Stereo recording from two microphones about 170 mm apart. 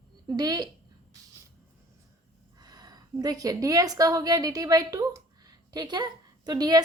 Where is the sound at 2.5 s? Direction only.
25° right (ahead or behind).